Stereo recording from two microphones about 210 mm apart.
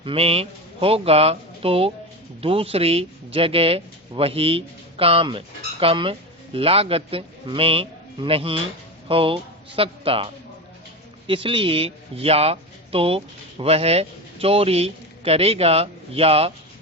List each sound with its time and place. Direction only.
0.0 s a man's voice: 25° right (ahead or behind)
11.3 s a man's voice: 25° right (ahead or behind)